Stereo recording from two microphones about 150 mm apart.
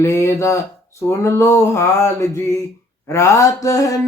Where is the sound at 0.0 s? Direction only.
20° left (ahead or behind).